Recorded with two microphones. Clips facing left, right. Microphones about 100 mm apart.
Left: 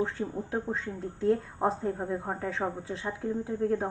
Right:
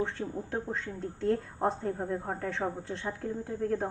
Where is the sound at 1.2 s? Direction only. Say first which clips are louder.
Left 2 dB; centre (ahead or behind).